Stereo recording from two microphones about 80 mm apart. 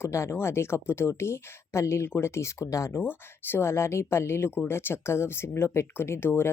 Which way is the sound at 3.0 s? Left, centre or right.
Left.